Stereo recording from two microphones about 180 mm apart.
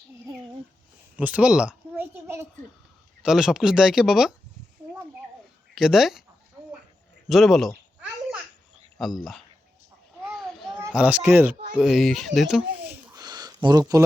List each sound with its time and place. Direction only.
1.1 s a sound: 10° right (ahead or behind)
3.2 s speech: 5° right (ahead or behind)
5.7 s speech: centre (ahead or behind)
7.3 s speech: centre (ahead or behind)
9.0 s speech: centre (ahead or behind)
10.3 s children playing: centre (ahead or behind)
11.8 s speech: centre (ahead or behind)
13.1 s a sound: 20° right (ahead or behind)